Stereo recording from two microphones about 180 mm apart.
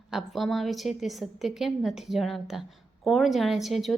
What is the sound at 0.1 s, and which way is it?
A woman's voice, centre (ahead or behind).